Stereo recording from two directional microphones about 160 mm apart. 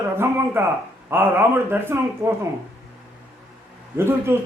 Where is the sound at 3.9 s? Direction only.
15° right (ahead or behind).